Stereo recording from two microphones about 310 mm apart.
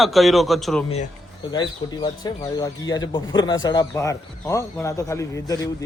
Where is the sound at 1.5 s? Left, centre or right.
Centre.